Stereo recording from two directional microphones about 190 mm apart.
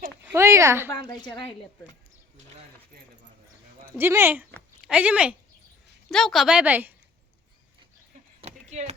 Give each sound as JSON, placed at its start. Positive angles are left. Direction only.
{"t": 0.3, "sound": "speech", "side_deg": -15}
{"t": 0.9, "sound": "a woman's voice", "side_deg": 20}
{"t": 3.9, "sound": "a woman's voice", "side_deg": -10}
{"t": 8.4, "sound": "a sound", "side_deg": -35}